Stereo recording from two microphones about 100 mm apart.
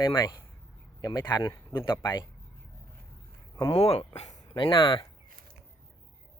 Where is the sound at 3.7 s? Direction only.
85° left.